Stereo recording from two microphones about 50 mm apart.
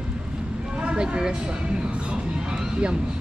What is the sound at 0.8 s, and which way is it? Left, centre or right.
Speech, centre.